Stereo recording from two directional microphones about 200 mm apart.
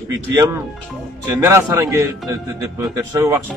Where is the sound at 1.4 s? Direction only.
15° right (ahead or behind).